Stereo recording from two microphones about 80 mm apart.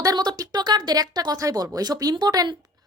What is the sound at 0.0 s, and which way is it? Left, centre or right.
Speech, right.